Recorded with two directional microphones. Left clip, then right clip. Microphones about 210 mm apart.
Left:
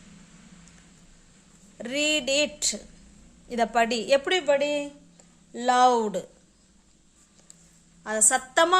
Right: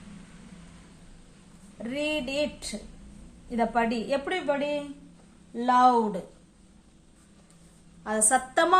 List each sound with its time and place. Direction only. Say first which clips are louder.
1.8 s a woman's voice: left 4 dB; 50° left (ahead or behind)
8.0 s a woman's voice: even; 35° left (ahead or behind)